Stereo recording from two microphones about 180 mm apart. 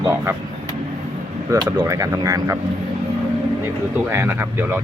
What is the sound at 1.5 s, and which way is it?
Speech, 20° right (ahead or behind).